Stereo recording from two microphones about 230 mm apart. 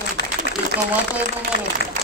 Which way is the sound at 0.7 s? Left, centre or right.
Left.